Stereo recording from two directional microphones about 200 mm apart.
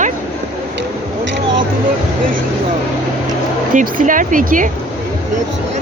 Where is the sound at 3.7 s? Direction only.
40° right (ahead or behind).